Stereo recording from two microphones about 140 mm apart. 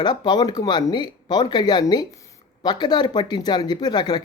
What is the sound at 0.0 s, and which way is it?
Speech, 30° left (ahead or behind).